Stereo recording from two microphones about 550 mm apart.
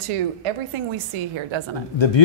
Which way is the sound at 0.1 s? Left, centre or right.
Right.